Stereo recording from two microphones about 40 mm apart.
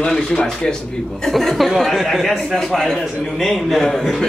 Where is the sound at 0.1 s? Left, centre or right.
Centre.